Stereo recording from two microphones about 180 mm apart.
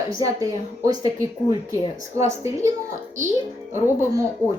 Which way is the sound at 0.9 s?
20° right (ahead or behind).